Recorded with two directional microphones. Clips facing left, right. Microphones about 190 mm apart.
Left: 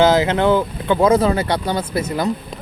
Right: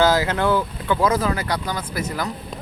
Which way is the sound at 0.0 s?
20° left (ahead or behind).